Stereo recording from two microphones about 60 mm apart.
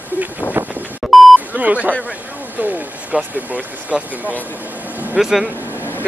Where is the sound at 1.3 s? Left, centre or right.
Right.